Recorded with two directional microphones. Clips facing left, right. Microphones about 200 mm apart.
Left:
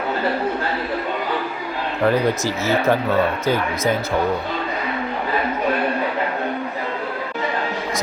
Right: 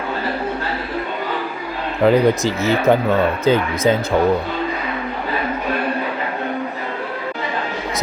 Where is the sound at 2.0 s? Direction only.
15° right (ahead or behind).